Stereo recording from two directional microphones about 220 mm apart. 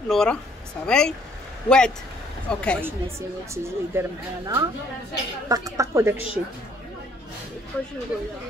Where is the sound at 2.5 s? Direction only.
5° left (ahead or behind).